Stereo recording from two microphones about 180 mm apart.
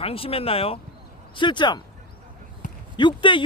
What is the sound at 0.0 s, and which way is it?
Speech, 30° left (ahead or behind).